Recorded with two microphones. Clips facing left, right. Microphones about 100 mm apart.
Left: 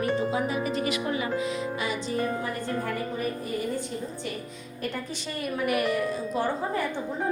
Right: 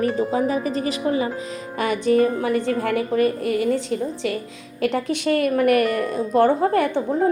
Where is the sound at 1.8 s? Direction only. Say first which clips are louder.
Right 16 dB; 60° right (ahead or behind); by 4.3 s 90° right.